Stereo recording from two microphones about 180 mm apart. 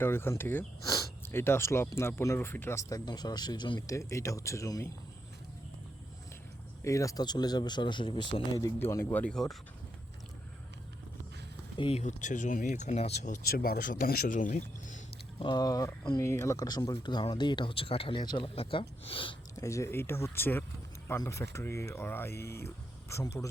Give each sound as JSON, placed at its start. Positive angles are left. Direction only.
{"t": 0.0, "sound": "speech", "side_deg": 15}
{"t": 6.8, "sound": "speech", "side_deg": 15}
{"t": 11.8, "sound": "speech", "side_deg": 35}
{"t": 15.4, "sound": "speech", "side_deg": 25}
{"t": 19.5, "sound": "speech", "side_deg": 15}